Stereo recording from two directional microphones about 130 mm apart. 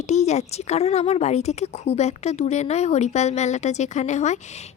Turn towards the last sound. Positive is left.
turn(degrees=65)  # may be behind; listen again after turning